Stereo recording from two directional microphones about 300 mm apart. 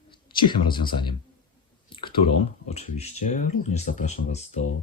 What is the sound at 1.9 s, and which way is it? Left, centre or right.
Clicking, centre.